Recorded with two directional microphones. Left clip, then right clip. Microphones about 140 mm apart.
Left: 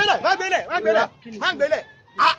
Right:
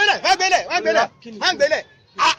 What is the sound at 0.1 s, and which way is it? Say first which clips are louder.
A man's voice: right 3 dB; 80° right.